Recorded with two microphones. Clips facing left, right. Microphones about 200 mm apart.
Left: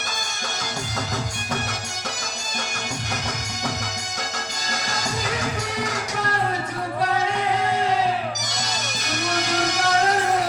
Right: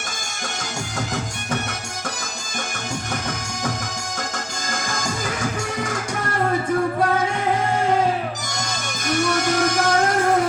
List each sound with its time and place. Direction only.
4.7 s music: 50° right (ahead or behind)
8.5 s music: 50° right (ahead or behind)